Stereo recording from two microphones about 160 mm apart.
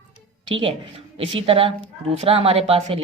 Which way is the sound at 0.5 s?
35° right (ahead or behind).